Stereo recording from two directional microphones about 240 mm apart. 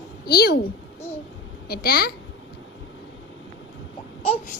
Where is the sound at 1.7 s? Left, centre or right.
Left.